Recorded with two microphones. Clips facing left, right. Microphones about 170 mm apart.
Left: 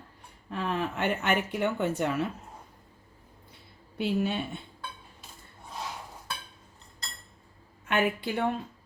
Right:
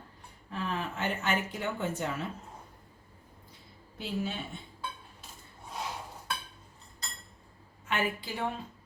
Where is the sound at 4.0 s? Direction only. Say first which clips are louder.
Left 7 dB; 65° left (ahead or behind).